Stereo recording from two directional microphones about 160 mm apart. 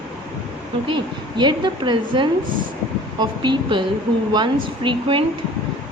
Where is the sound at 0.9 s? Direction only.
30° right (ahead or behind).